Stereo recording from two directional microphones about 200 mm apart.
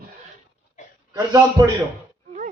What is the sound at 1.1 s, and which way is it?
Speech, 20° right (ahead or behind).